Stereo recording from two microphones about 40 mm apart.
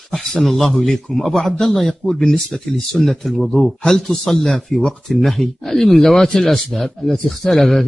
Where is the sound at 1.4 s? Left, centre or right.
Centre.